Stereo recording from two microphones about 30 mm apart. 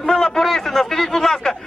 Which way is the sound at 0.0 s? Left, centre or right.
Centre.